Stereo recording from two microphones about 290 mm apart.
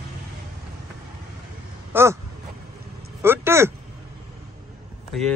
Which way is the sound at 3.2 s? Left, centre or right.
Centre.